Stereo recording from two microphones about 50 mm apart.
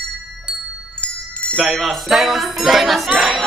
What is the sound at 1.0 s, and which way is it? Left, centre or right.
Chime, centre.